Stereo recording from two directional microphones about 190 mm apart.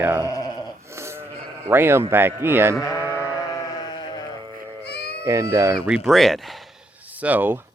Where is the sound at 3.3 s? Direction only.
20° left (ahead or behind).